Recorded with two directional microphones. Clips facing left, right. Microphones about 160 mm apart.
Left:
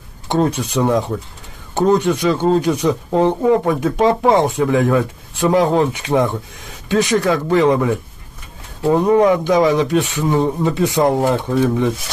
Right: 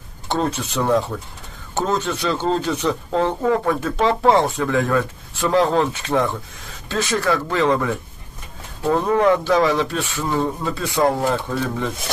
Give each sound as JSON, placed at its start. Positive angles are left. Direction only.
{"t": 0.3, "sound": "speech", "side_deg": 15}